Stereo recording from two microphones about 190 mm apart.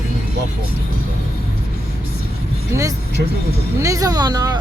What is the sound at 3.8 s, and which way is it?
Speech, 15° right (ahead or behind).